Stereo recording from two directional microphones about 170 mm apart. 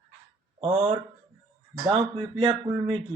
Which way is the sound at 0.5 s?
35° right (ahead or behind).